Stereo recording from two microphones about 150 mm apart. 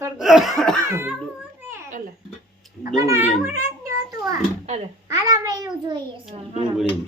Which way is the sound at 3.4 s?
20° right (ahead or behind).